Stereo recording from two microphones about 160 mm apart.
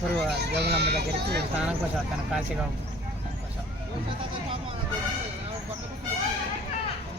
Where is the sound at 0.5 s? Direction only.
90° right.